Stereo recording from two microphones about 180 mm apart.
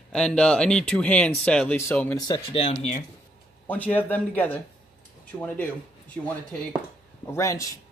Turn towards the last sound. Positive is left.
turn(degrees=15)  # may be behind; listen again after turning